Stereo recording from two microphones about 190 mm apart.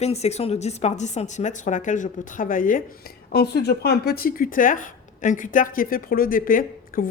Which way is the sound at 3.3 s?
60° left (ahead or behind).